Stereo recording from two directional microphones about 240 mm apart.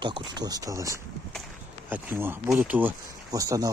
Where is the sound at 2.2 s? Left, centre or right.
Centre.